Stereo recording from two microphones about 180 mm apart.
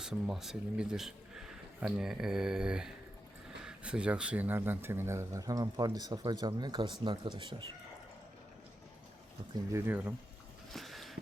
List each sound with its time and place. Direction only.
0.0 s speech: 5° right (ahead or behind); by 7.5 s 30° right (ahead or behind)
9.7 s speech: 10° right (ahead or behind)
10.7 s a sound: centre (ahead or behind)